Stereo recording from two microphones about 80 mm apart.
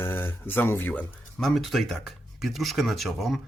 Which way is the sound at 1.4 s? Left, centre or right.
Centre.